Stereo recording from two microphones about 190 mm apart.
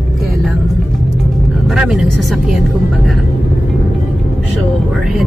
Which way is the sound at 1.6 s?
5° right (ahead or behind).